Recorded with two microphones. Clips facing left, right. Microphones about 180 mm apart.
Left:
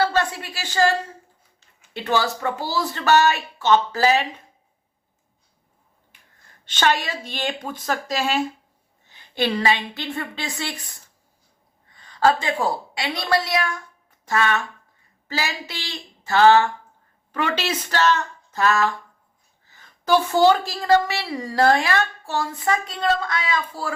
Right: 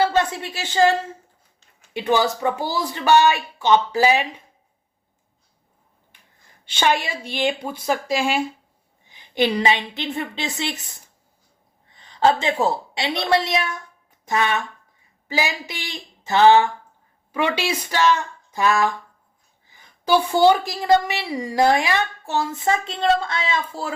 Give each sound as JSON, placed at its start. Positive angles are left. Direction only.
{"t": 0.0, "sound": "a sound", "side_deg": -20}
{"t": 1.9, "sound": "a woman's voice", "side_deg": -15}
{"t": 6.7, "sound": "a woman's voice", "side_deg": -10}